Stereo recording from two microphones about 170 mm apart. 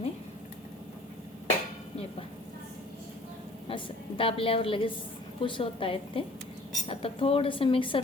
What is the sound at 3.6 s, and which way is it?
A woman's voice, 30° left (ahead or behind).